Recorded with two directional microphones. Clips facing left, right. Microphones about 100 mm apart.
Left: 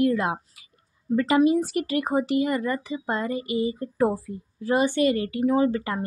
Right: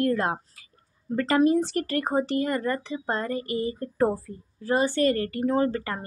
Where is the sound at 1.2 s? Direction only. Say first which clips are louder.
Left 1 dB; 10° left (ahead or behind).